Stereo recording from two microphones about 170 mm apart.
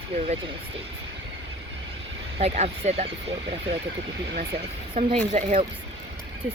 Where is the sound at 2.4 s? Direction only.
40° right (ahead or behind).